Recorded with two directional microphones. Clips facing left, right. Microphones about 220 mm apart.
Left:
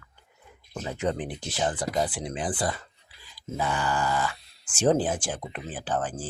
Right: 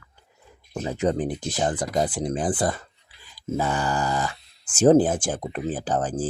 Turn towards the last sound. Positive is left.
turn(degrees=-40)  # may be behind; listen again after turning